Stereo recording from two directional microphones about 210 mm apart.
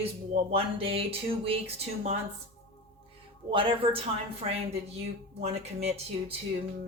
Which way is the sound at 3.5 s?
25° right (ahead or behind).